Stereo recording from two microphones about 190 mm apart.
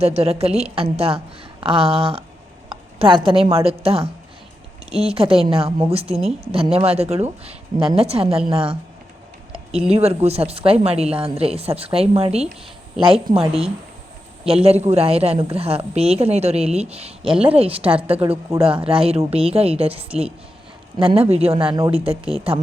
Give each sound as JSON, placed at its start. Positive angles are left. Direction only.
{"t": 0.0, "sound": "a woman's voice", "side_deg": -35}
{"t": 9.9, "sound": "a woman's voice", "side_deg": -30}